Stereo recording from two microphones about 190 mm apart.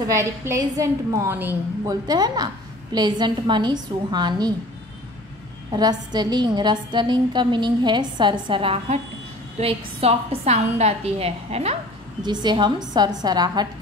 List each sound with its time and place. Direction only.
0.1 s a woman's voice: 15° right (ahead or behind)
5.7 s a woman's voice: 20° right (ahead or behind)
12.2 s a woman's voice: 20° right (ahead or behind)